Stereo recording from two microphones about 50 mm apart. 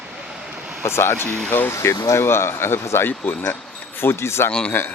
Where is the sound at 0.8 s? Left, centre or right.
Left.